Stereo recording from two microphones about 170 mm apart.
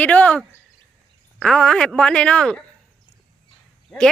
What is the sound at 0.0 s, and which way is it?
Speech, 10° left (ahead or behind).